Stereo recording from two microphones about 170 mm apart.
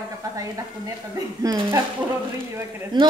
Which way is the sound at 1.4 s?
20° right (ahead or behind).